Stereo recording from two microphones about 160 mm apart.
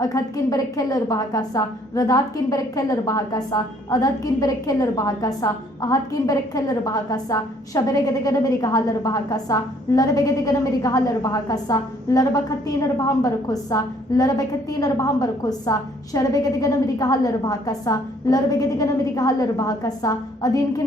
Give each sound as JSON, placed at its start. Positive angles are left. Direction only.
{"t": 0.0, "sound": "a woman's voice", "side_deg": 20}